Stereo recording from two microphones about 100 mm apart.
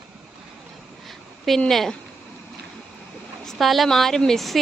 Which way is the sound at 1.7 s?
Centre (ahead or behind).